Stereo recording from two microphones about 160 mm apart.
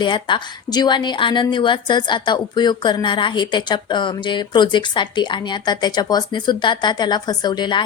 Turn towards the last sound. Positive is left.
turn(degrees=25)  # may be behind; listen again after turning